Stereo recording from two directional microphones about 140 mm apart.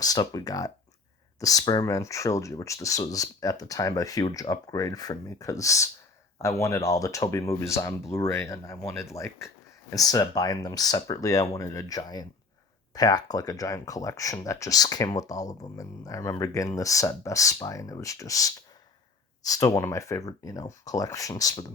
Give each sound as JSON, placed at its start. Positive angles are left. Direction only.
{"t": 0.0, "sound": "speech", "side_deg": 25}